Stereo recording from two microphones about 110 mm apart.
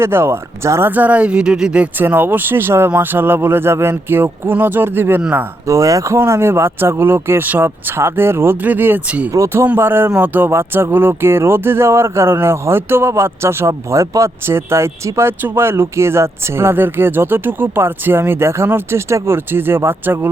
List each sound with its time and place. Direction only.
0.0 s speech: 25° right (ahead or behind)